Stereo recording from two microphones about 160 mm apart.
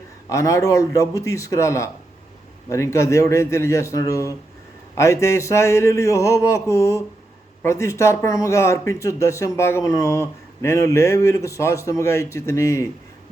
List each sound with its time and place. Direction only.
0.3 s speech: 20° left (ahead or behind)